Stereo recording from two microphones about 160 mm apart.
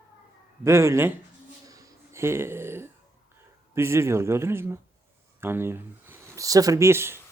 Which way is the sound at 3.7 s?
15° right (ahead or behind).